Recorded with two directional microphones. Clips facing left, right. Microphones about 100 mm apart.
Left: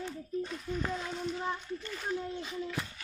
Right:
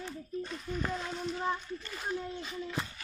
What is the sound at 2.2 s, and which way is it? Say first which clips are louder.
Speech: left 2 dB; 15° left (ahead or behind).